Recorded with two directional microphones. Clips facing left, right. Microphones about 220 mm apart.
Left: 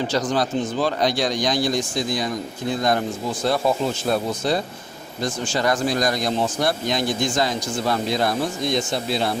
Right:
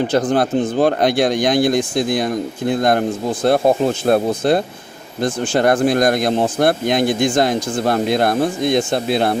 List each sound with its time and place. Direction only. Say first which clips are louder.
0.1 s speech: right 6 dB; 55° right (ahead or behind)